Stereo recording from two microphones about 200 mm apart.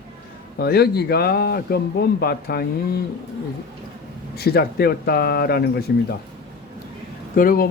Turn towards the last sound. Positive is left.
turn(degrees=45)  # may be behind; listen again after turning